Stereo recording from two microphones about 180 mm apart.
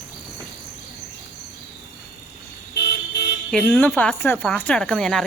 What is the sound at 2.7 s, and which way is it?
Vehicle, 70° left (ahead or behind).